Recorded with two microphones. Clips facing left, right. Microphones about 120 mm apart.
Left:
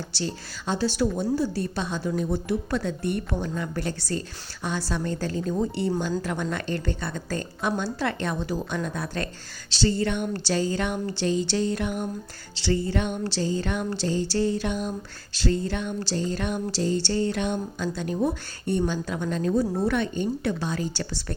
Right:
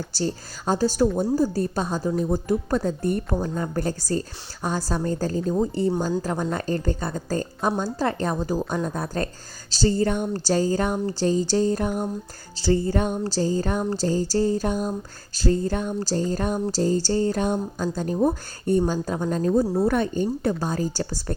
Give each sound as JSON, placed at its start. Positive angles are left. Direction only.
{"t": 0.2, "sound": "a woman's voice", "side_deg": -40}